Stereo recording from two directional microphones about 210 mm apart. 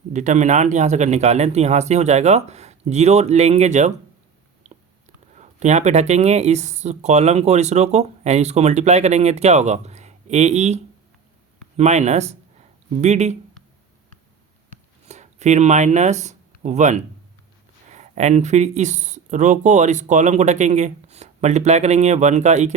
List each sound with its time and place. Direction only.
0.1 s speech: 35° right (ahead or behind)
4.7 s a sound: 35° right (ahead or behind)
5.4 s speech: 35° right (ahead or behind)
11.8 s speech: 35° right (ahead or behind)
15.0 s speech: 35° right (ahead or behind)